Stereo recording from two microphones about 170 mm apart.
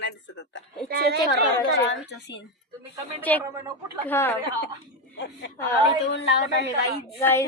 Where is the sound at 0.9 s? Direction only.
70° right (ahead or behind).